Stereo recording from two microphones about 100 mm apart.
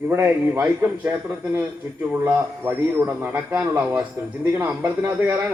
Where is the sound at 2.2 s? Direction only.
20° right (ahead or behind).